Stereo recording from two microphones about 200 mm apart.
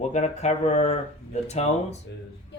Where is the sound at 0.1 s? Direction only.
35° left (ahead or behind).